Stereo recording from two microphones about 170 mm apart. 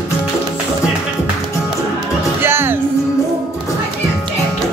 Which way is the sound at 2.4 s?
15° right (ahead or behind).